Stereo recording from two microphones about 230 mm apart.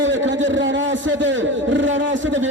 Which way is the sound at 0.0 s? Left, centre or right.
Right.